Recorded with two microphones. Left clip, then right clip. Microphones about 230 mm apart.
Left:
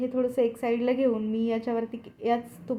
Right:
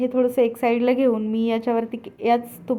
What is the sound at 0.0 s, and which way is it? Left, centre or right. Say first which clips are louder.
A woman's voice: right 6 dB; right.